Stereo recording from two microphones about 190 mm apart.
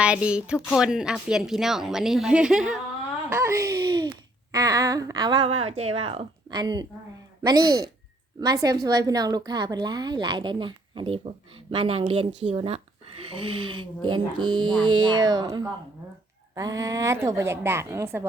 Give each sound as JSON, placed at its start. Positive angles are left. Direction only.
{"t": 0.0, "sound": "speech", "side_deg": -5}
{"t": 3.2, "sound": "a woman's voice", "side_deg": -15}